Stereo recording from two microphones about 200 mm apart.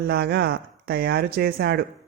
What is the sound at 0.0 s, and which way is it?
Speech, 50° right (ahead or behind).